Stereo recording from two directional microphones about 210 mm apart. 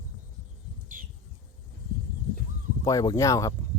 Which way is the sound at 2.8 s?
15° left (ahead or behind).